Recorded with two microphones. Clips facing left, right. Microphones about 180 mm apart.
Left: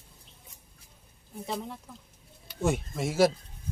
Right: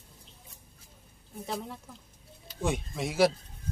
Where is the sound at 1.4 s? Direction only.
Centre (ahead or behind).